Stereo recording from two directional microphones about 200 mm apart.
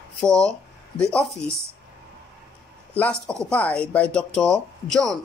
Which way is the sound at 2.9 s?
5° left (ahead or behind).